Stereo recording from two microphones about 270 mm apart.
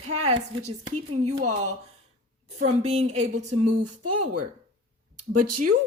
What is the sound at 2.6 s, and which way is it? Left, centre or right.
A woman's voice, right.